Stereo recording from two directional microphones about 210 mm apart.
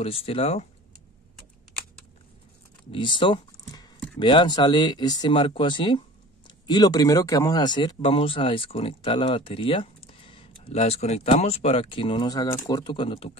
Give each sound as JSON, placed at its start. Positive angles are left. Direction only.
{"t": 0.0, "sound": "speech", "side_deg": 25}
{"t": 2.9, "sound": "speech", "side_deg": 25}